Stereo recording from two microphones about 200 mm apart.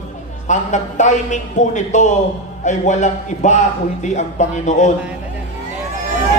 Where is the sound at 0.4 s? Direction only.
35° left (ahead or behind).